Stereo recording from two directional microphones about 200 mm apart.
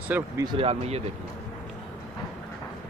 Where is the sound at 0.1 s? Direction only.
15° right (ahead or behind).